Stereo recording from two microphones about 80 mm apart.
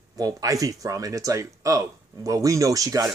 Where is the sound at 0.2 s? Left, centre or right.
Right.